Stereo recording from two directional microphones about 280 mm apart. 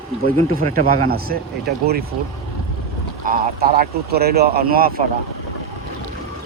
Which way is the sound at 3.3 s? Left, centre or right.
Right.